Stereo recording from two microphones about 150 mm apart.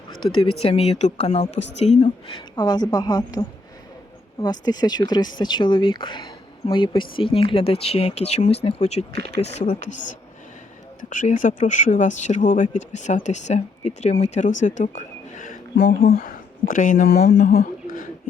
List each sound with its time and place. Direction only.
0.6 s speech: 40° left (ahead or behind); by 3.4 s 25° left (ahead or behind)
4.4 s speech: 25° left (ahead or behind); by 17.7 s 50° left (ahead or behind)
17.8 s a sound: 65° left (ahead or behind)